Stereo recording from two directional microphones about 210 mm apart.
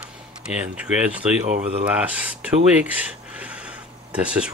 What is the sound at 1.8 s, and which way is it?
Speech, 5° right (ahead or behind).